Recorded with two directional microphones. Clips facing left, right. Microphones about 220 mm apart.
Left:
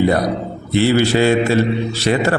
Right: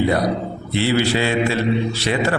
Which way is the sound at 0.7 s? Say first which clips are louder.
Left 4 dB; 45° left (ahead or behind).